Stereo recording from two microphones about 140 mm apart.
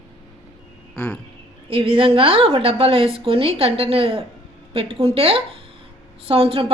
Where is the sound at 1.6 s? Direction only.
40° right (ahead or behind).